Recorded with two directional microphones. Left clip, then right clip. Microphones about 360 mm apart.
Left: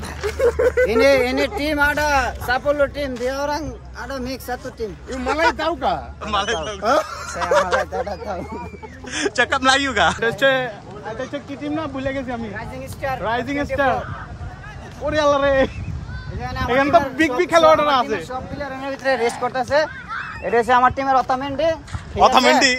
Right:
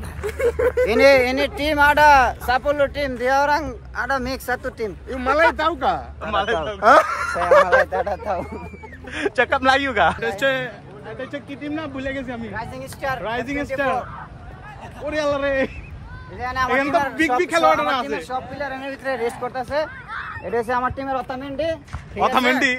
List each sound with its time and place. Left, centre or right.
0.2 s speech: centre
7.1 s a sound: right
7.9 s speech: right
9.1 s speech: centre
15.0 s speech: centre
16.7 s speech: centre
19.0 s speech: left
20.1 s a sound: right
20.4 s speech: left; by 22.8 s centre